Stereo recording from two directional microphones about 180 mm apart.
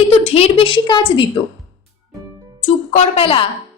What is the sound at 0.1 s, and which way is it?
A woman's voice, 35° left (ahead or behind).